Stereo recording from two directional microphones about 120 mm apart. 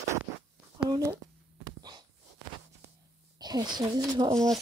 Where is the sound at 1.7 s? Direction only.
35° right (ahead or behind).